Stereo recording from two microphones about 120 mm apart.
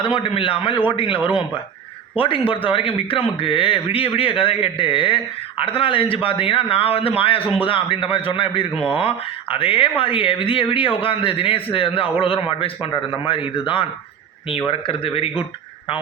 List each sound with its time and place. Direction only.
0.0 s a man's voice: 45° left (ahead or behind)